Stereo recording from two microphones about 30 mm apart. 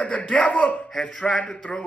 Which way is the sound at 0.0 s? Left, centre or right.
Left.